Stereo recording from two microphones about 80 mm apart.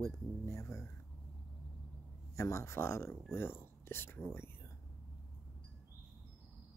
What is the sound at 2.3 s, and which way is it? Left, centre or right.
Speech, left.